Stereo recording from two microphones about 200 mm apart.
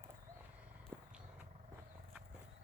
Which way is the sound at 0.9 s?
5° right (ahead or behind).